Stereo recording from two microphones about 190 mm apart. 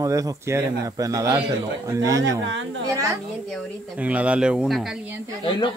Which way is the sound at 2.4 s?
75° right (ahead or behind).